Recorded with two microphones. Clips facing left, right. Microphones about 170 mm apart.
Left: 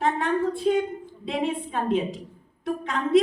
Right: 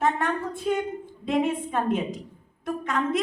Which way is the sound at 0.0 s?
45° right (ahead or behind).